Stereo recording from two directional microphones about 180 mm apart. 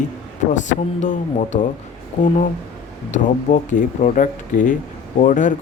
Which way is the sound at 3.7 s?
45° left (ahead or behind).